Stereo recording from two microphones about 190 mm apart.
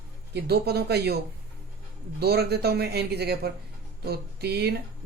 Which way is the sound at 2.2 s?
55° right (ahead or behind).